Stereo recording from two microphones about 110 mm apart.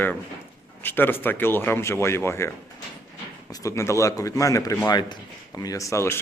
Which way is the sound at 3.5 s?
30° left (ahead or behind).